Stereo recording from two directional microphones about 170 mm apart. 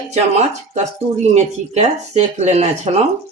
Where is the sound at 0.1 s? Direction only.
40° right (ahead or behind).